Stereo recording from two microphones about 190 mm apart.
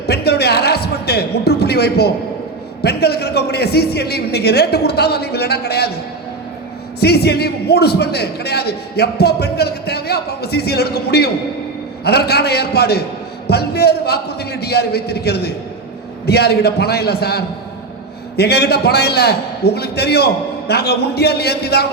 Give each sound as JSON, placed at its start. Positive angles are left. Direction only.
{"t": 0.0, "sound": "a sound", "side_deg": 60}
{"t": 2.8, "sound": "a man's voice", "side_deg": 55}
{"t": 7.0, "sound": "a man's voice", "side_deg": 60}